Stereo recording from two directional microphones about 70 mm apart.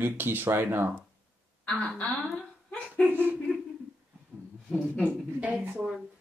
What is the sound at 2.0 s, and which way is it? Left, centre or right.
Speech, left.